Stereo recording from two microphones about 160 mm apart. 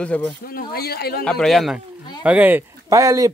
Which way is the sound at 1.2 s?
5° left (ahead or behind).